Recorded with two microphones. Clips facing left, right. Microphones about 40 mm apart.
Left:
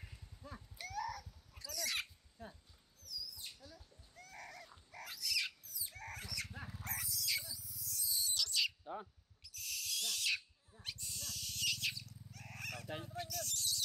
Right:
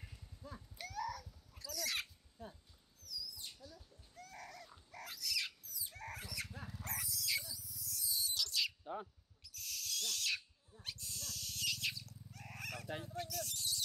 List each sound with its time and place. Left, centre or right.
0.0 s a sound: centre
6.5 s dog: centre
6.8 s dog: centre
7.4 s owl: centre
7.8 s owl: centre